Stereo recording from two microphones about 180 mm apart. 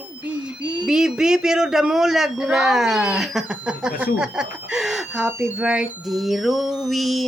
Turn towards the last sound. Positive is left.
turn(degrees=0)  # may be behind; listen again after turning